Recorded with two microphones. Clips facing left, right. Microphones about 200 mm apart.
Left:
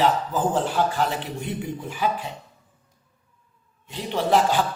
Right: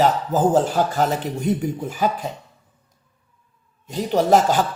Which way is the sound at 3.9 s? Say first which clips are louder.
Right 5 dB; 40° right (ahead or behind).